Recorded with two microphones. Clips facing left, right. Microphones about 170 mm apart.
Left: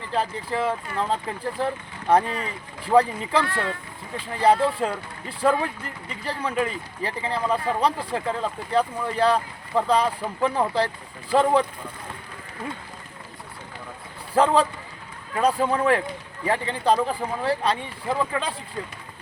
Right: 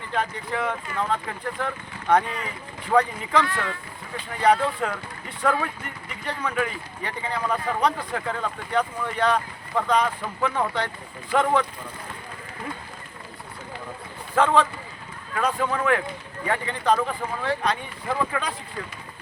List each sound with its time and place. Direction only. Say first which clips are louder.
0.1 s speech: left 1 dB; 30° left (ahead or behind)
14.3 s speech: left 1 dB; 35° left (ahead or behind)